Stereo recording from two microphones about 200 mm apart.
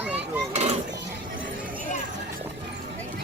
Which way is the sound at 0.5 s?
35° right (ahead or behind).